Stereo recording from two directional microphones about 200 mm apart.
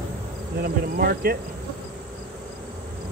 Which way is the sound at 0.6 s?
50° right (ahead or behind).